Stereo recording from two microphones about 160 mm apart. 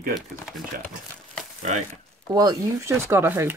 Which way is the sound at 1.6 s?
45° right (ahead or behind).